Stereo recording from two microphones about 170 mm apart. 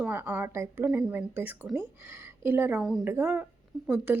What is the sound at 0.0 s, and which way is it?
A woman's voice, 10° right (ahead or behind).